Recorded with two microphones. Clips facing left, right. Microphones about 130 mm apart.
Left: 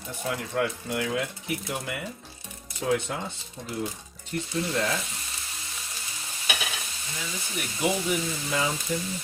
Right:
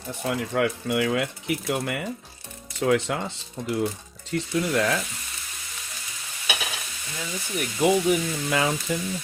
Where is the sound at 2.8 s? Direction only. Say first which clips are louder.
Right 4 dB; 80° right.